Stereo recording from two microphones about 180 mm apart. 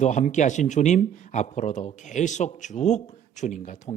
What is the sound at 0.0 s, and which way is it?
Speech, 40° left (ahead or behind).